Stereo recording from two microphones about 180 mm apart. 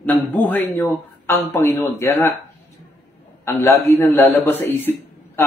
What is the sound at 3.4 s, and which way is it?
A man's voice, 15° left (ahead or behind).